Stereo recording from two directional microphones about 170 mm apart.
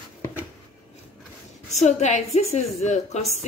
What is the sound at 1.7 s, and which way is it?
A woman's voice, 45° left (ahead or behind).